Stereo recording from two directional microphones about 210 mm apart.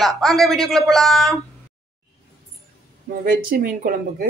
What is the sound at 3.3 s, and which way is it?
Speech, 45° right (ahead or behind).